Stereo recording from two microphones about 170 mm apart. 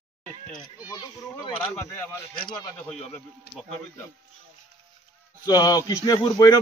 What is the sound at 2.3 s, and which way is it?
Speech, 25° left (ahead or behind).